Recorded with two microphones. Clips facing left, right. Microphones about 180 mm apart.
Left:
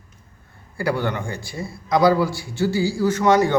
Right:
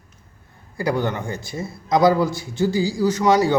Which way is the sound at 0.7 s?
20° right (ahead or behind).